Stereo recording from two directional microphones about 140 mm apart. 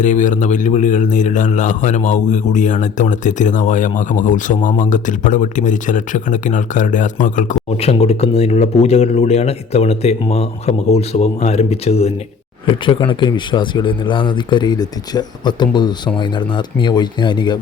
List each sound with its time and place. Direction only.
0.0 s a man's voice: 65° left (ahead or behind)
7.8 s speech: 45° left (ahead or behind)